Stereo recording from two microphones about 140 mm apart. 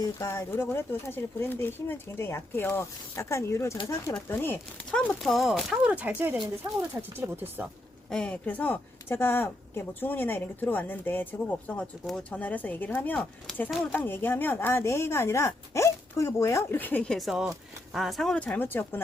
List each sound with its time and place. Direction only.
0.0 s speech: 20° left (ahead or behind)
4.9 s speech: 5° left (ahead or behind); by 7.7 s 15° right (ahead or behind)
8.1 s speech: 10° left (ahead or behind)